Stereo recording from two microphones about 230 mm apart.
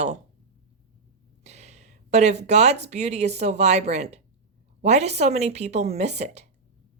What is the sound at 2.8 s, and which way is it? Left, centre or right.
A woman's voice, right.